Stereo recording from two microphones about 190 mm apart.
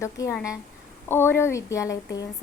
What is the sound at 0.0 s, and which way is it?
A woman's voice, 15° left (ahead or behind).